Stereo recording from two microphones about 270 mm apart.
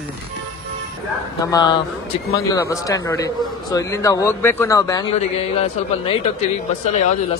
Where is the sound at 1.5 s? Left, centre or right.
Centre.